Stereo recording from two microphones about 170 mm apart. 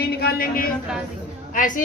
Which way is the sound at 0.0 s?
65° left (ahead or behind).